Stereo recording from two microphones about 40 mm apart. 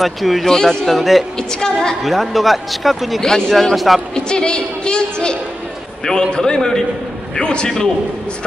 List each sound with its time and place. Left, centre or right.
0.0 s speech: centre
0.5 s a man's voice: centre
0.9 s speech: centre
1.5 s a man's voice: centre
2.0 s speech: centre
3.2 s a man's voice: centre
3.7 s speech: centre
4.1 s a woman's voice: left